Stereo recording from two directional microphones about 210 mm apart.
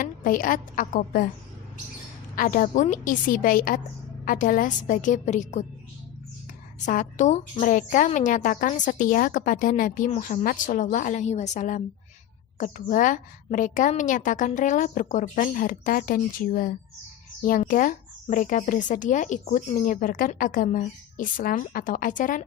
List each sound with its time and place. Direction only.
0.0 s speech: 40° left (ahead or behind)
2.3 s speech: 40° left (ahead or behind)
6.7 s speech: 35° left (ahead or behind)